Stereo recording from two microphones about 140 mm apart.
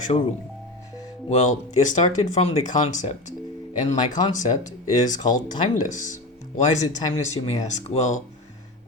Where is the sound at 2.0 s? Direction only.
50° left (ahead or behind).